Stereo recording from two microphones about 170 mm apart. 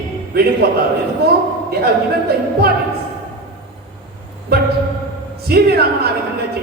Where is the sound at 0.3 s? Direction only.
65° right (ahead or behind).